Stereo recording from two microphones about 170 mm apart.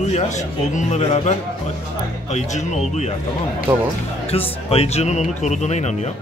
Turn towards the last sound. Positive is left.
turn(degrees=40)  # may be behind; listen again after turning